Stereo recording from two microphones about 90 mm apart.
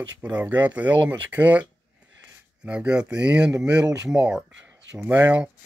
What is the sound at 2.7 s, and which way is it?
Speech, 10° right (ahead or behind).